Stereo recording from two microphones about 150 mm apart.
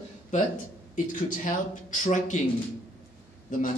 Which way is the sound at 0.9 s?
60° left (ahead or behind).